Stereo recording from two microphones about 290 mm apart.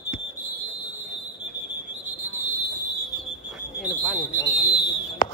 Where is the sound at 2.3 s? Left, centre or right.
Centre.